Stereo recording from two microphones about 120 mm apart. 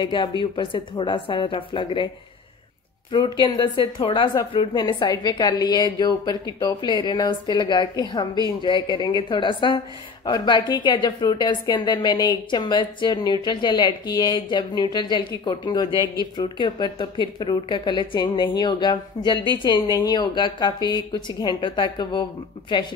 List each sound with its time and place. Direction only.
0.0 s a woman's voice: 40° left (ahead or behind)
3.1 s a woman's voice: 40° left (ahead or behind)